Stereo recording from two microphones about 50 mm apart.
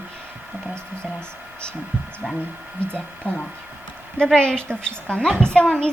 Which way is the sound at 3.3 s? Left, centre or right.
Left.